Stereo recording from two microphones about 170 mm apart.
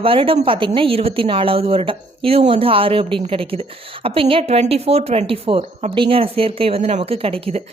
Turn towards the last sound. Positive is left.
turn(degrees=-35)  # may be behind; listen again after turning